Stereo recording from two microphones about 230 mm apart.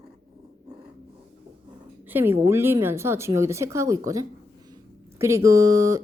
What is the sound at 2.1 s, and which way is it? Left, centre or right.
Speech, centre.